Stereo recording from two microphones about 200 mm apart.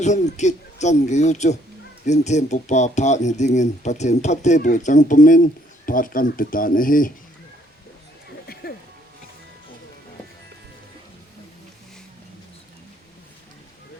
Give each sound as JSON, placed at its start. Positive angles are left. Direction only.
{"t": 0.0, "sound": "speech", "side_deg": 35}